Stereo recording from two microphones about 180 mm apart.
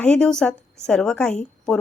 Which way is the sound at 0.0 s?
5° left (ahead or behind).